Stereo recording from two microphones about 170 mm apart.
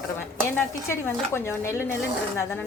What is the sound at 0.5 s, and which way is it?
Speech, 15° left (ahead or behind).